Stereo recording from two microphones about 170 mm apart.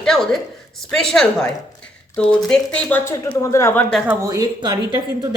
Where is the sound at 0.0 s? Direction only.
5° left (ahead or behind).